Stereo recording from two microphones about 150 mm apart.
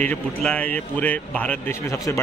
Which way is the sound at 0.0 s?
10° left (ahead or behind).